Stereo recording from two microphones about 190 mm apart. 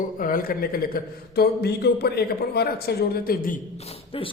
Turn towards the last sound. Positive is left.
turn(degrees=50)  # may be behind; listen again after turning